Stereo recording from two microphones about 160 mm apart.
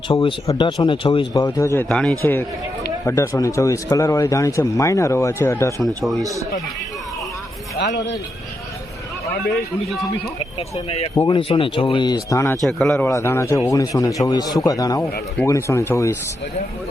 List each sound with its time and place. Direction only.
0.1 s a man's voice: 35° left (ahead or behind)
1.5 s speech: 20° left (ahead or behind)
1.9 s a man's voice: 5° left (ahead or behind)
7.8 s speech: 90° left
10.8 s speech: 40° left (ahead or behind); by 12.5 s 20° left (ahead or behind)
12.6 s speech: centre (ahead or behind)
13.1 s a man's voice: 15° left (ahead or behind)